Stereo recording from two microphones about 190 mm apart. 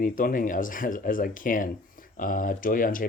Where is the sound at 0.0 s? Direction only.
45° left (ahead or behind).